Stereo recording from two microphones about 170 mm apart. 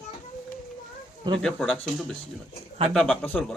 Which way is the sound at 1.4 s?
5° left (ahead or behind).